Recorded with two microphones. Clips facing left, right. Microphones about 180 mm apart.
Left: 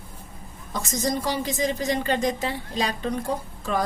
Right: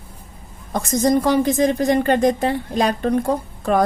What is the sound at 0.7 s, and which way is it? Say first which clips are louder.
A woman's voice: right 9 dB; 55° right (ahead or behind).